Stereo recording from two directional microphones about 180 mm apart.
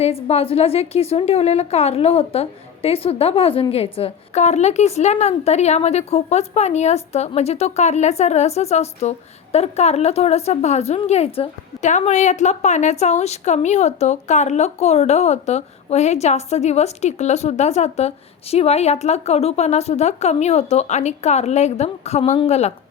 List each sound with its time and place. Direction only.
0.0 s a woman's voice: 35° left (ahead or behind)